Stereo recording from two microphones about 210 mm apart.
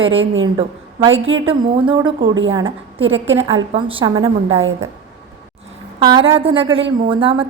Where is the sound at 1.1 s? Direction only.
65° right (ahead or behind).